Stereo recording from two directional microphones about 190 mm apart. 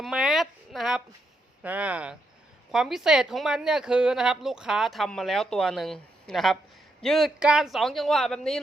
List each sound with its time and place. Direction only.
0.0 s speech: centre (ahead or behind)